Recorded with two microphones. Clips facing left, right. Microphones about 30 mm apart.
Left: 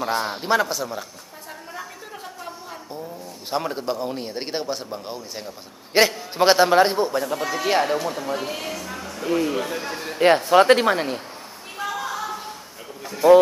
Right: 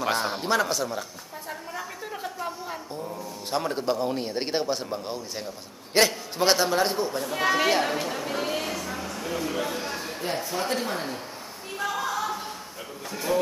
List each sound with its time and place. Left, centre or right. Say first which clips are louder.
0.1 s a man's voice: left 4 dB; centre
1.7 s a sound: even; centre
3.4 s a man's voice: left 1 dB; centre
5.9 s a man's voice: left 4 dB; centre
7.3 s speech: right 3 dB; right
7.8 s a man's voice: left 4 dB; centre
8.2 s a sound: left 1 dB; centre
9.2 s speech: left 10 dB; left
9.5 s speech: left 3 dB; centre
10.2 s speech: left 16 dB; left
11.8 s a sound: even; centre
13.2 s a man's voice: left 14 dB; centre